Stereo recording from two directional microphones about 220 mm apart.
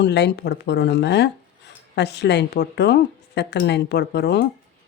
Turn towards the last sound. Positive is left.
turn(degrees=50)  # may be behind; listen again after turning